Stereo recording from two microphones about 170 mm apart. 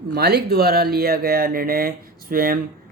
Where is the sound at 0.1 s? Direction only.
70° right (ahead or behind).